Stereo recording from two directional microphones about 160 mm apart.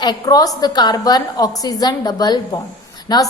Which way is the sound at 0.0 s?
25° left (ahead or behind).